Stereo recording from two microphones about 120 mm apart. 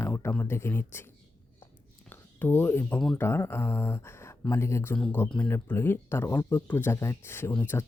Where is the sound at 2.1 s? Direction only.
15° left (ahead or behind).